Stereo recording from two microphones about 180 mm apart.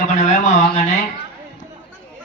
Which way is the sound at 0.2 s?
45° left (ahead or behind).